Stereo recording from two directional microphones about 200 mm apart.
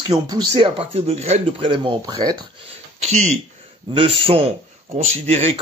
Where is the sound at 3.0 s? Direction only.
35° right (ahead or behind).